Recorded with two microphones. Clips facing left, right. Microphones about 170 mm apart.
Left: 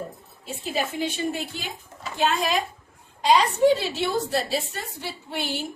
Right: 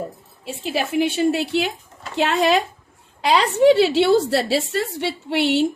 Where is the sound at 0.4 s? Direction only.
75° right (ahead or behind).